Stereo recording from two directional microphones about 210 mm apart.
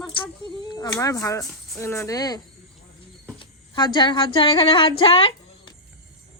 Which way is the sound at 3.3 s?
25° left (ahead or behind).